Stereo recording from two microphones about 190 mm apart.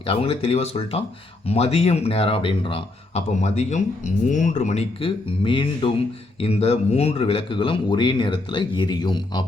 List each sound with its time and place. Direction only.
0.1 s speech: 30° left (ahead or behind)